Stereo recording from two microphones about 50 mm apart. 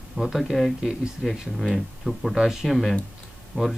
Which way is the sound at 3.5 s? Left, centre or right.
Right.